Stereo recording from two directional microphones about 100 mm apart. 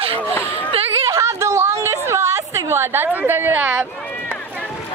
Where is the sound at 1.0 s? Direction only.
30° right (ahead or behind).